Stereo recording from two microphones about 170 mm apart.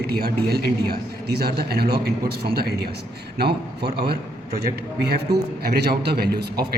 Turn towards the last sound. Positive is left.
turn(degrees=-70)  # may be behind; listen again after turning